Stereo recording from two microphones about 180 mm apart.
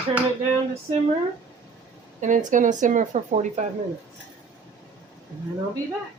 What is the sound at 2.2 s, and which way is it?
Speech, 45° right (ahead or behind).